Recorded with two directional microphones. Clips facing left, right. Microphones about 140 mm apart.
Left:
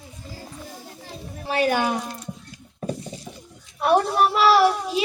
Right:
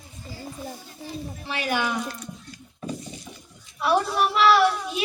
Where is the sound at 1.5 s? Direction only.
40° left (ahead or behind).